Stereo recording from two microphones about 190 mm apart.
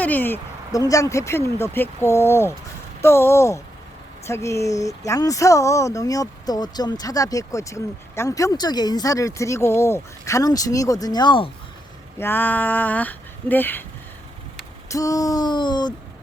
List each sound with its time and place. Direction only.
0.0 s speech: 10° left (ahead or behind); by 11.5 s 25° left (ahead or behind)
12.2 s speech: 10° left (ahead or behind)
14.8 s a sound: 15° left (ahead or behind)